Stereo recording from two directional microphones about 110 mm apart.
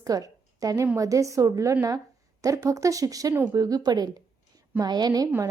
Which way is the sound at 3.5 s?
35° right (ahead or behind).